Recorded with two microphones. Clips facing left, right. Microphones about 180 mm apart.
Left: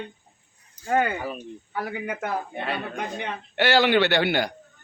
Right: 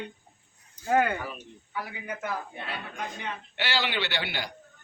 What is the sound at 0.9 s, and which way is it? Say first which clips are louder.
Speech: left 1 dB; centre (ahead or behind).